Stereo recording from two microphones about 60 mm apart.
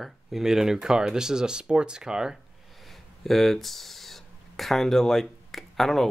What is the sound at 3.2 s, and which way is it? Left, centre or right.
Speech, centre.